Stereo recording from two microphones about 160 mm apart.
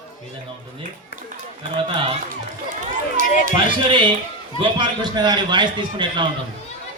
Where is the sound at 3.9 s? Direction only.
30° right (ahead or behind).